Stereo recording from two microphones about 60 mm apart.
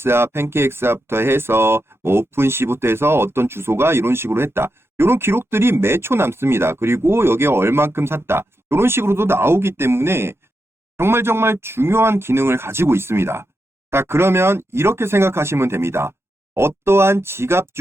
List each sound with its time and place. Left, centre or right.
0.0 s speech: right